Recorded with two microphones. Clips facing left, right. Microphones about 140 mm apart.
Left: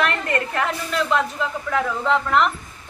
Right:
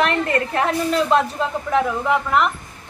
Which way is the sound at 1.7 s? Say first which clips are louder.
Right 2 dB; 20° right (ahead or behind).